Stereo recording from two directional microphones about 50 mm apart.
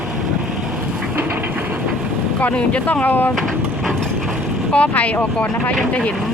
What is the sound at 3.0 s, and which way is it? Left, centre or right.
Speech, left.